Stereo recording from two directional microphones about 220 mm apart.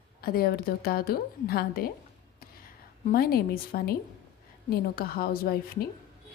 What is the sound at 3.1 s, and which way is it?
Speech, 45° left (ahead or behind).